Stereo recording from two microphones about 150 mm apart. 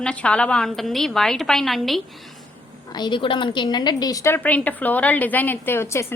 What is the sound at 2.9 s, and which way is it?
A woman's voice, 30° left (ahead or behind).